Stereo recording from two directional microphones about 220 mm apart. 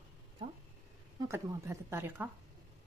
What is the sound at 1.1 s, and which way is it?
Speech, 15° right (ahead or behind).